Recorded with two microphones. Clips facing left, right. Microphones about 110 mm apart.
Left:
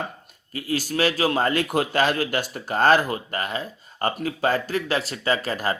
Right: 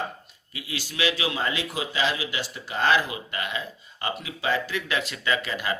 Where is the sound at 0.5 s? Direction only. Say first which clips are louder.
Left 9 dB; 45° left (ahead or behind).